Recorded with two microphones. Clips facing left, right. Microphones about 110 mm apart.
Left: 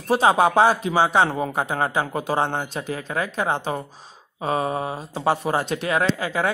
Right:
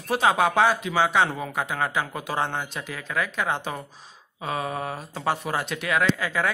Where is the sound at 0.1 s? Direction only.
30° left (ahead or behind).